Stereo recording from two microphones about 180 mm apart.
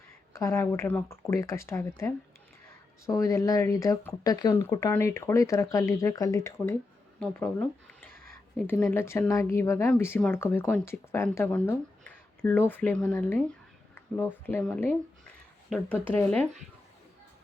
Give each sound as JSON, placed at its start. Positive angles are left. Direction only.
{"t": 0.3, "sound": "speech", "side_deg": 15}
{"t": 8.6, "sound": "speech", "side_deg": 10}